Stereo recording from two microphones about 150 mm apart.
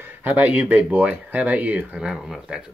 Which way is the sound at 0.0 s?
10° right (ahead or behind).